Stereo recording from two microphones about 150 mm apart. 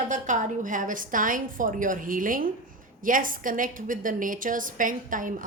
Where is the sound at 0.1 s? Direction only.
55° right (ahead or behind).